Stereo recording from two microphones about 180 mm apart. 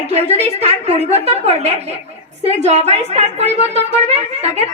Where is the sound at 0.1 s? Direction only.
35° right (ahead or behind).